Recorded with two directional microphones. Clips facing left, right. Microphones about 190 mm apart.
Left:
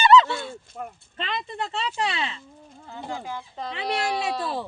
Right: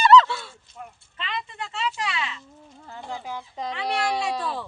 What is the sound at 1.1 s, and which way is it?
Speech, 35° left (ahead or behind).